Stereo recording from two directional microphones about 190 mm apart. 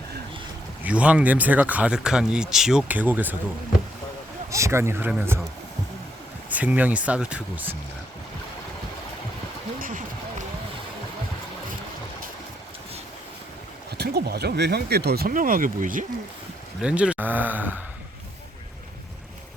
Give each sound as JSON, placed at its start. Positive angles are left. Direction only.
{"t": 0.9, "sound": "speech", "side_deg": -5}
{"t": 4.5, "sound": "speech", "side_deg": -15}
{"t": 6.5, "sound": "speech", "side_deg": -10}
{"t": 9.7, "sound": "a sound", "side_deg": -45}
{"t": 14.0, "sound": "speech", "side_deg": -60}
{"t": 16.8, "sound": "speech", "side_deg": -5}